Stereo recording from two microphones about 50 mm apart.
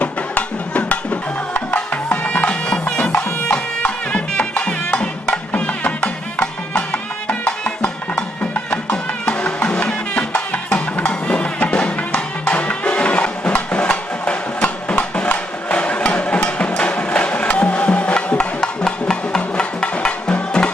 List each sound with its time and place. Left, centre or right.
0.0 s music: left